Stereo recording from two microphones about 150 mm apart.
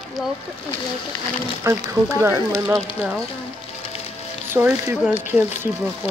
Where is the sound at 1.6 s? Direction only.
20° right (ahead or behind).